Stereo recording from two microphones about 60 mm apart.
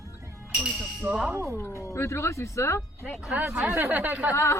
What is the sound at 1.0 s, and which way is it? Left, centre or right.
Speech, right.